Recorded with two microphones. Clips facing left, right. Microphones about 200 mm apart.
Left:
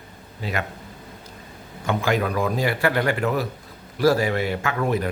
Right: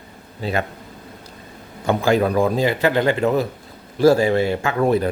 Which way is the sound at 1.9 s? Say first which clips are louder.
Right 5 dB; 30° right (ahead or behind).